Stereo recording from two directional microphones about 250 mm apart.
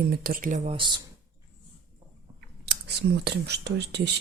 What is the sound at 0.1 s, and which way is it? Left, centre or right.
Speech, right.